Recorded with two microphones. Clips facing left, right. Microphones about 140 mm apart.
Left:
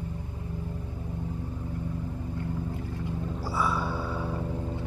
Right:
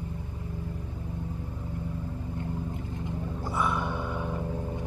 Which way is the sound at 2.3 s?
20° right (ahead or behind).